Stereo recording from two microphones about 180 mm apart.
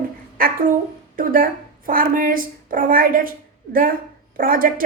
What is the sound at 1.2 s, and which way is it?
A woman's voice, 50° right (ahead or behind).